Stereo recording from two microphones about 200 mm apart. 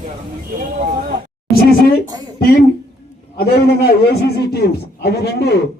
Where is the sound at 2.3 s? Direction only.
50° left (ahead or behind).